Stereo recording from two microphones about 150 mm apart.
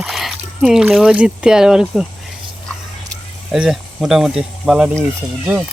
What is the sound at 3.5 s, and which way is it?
Speech, centre (ahead or behind).